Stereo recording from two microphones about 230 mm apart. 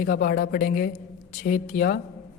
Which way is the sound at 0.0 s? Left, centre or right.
Left.